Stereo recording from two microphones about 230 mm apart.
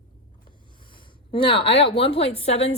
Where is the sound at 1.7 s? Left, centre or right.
Left.